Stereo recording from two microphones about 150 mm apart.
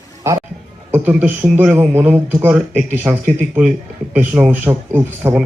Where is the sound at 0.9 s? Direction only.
10° right (ahead or behind).